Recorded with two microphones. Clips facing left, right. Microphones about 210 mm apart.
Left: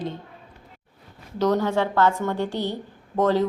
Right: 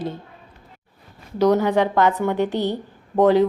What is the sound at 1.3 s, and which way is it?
A woman's voice, 10° right (ahead or behind).